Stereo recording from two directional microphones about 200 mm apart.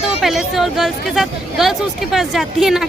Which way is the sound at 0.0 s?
Centre (ahead or behind).